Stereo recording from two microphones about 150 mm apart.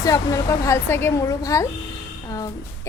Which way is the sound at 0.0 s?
25° left (ahead or behind).